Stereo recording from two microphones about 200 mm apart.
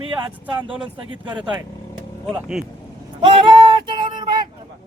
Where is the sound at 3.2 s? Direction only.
25° right (ahead or behind).